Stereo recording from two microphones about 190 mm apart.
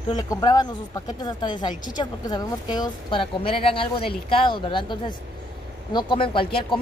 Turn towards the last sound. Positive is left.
turn(degrees=25)  # may be behind; listen again after turning